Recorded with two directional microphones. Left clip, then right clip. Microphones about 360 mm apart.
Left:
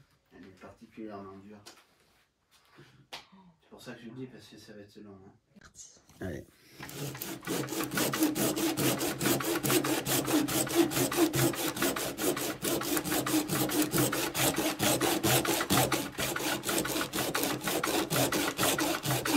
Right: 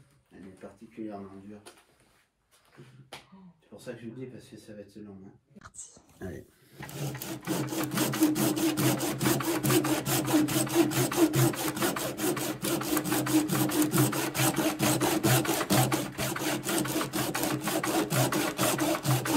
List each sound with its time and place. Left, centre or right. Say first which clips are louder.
6.2 s speech: left 1 dB; centre
7.1 s wood: right 3 dB; centre